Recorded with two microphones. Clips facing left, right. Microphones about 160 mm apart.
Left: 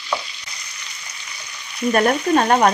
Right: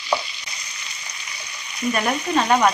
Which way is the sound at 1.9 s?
50° left (ahead or behind).